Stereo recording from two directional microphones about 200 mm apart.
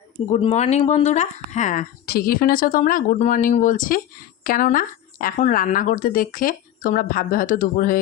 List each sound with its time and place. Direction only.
0.3 s speech: 30° left (ahead or behind)